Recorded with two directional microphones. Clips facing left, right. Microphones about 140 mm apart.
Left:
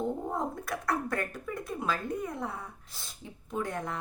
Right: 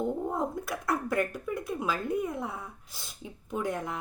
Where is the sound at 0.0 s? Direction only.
Centre (ahead or behind).